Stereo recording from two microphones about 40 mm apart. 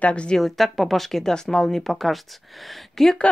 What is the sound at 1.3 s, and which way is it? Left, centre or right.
Speech, centre.